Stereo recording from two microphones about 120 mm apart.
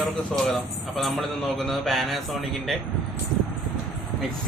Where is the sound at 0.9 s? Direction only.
Centre (ahead or behind).